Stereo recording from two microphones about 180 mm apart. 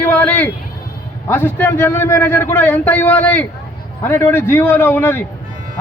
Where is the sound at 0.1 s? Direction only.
10° left (ahead or behind).